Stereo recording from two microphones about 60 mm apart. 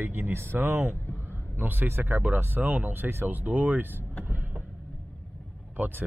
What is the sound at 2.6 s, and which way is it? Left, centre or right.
Speech, right.